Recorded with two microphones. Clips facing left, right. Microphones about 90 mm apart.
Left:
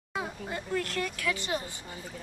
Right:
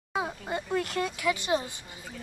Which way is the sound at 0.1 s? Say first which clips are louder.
Right 4 dB; 20° right (ahead or behind).